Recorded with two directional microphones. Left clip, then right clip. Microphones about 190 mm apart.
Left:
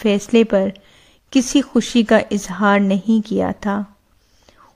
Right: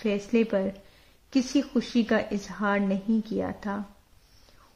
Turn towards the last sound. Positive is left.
turn(degrees=30)  # may be behind; listen again after turning